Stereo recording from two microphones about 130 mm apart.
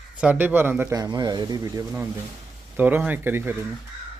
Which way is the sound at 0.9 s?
35° right (ahead or behind).